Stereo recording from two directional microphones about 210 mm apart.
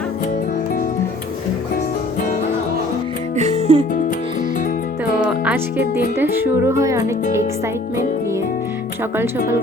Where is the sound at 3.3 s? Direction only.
30° right (ahead or behind).